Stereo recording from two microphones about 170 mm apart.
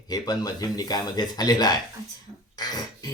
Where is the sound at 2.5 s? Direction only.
25° left (ahead or behind).